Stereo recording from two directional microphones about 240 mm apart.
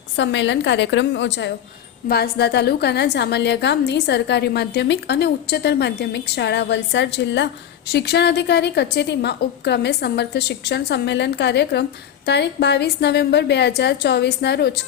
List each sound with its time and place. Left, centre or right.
0.2 s a woman's voice: left